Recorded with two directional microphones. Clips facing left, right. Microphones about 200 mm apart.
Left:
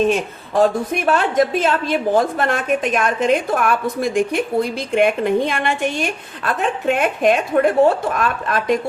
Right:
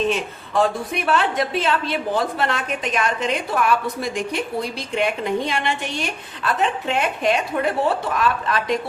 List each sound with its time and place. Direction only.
0.0 s a woman's voice: 45° left (ahead or behind)